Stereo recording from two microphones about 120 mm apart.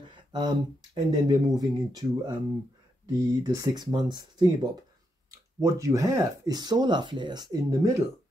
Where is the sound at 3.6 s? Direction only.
35° right (ahead or behind).